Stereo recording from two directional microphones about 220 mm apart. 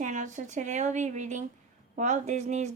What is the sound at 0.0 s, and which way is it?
Speech, 35° right (ahead or behind).